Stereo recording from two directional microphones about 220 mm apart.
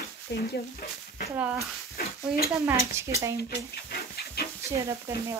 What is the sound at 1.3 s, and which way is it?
Speech, 5° right (ahead or behind).